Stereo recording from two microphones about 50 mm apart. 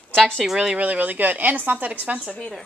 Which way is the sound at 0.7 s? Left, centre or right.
Right.